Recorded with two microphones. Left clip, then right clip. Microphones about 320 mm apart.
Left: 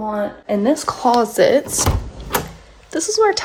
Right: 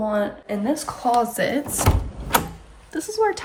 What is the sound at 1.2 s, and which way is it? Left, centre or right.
Speech, centre.